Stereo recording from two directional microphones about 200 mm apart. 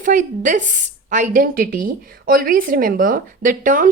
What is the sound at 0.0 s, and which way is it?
A woman's voice, 40° right (ahead or behind).